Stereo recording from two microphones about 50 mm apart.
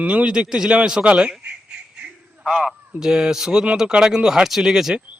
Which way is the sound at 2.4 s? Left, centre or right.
Centre.